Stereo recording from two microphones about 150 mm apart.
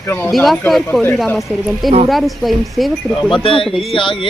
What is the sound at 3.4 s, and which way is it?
Speech, 35° left (ahead or behind).